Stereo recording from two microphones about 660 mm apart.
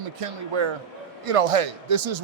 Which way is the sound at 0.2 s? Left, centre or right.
Right.